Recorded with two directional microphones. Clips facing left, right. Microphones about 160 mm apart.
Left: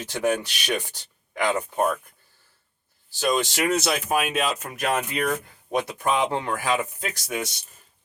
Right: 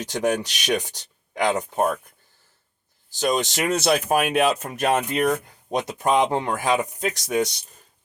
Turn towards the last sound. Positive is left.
turn(degrees=-20)  # may be behind; listen again after turning